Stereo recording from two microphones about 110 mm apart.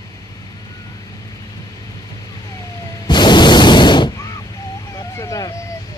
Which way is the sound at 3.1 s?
40° left (ahead or behind).